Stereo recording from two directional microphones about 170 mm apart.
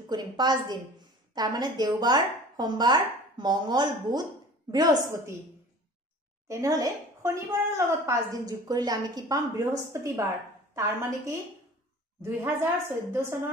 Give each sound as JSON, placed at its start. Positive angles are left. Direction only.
{"t": 0.1, "sound": "a woman's voice", "side_deg": -25}
{"t": 6.4, "sound": "a woman's voice", "side_deg": -20}